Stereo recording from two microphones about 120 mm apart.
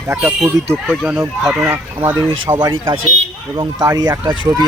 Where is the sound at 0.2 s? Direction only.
Centre (ahead or behind).